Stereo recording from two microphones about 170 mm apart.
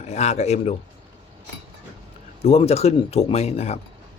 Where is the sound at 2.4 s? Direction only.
35° left (ahead or behind).